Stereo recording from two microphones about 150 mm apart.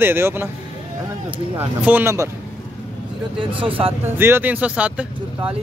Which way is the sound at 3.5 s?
35° right (ahead or behind).